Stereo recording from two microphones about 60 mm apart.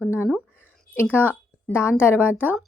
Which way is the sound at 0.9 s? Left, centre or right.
Left.